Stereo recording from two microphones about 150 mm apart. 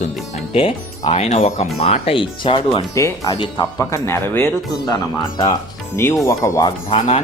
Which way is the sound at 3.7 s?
20° left (ahead or behind).